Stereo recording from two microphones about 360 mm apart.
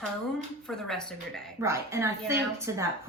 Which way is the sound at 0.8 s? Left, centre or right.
Centre.